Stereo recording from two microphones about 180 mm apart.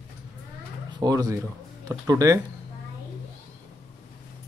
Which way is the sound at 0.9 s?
20° right (ahead or behind).